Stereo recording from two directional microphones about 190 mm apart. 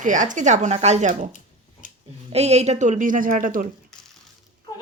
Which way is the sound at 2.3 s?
35° right (ahead or behind).